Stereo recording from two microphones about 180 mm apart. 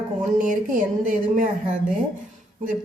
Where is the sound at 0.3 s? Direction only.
45° right (ahead or behind).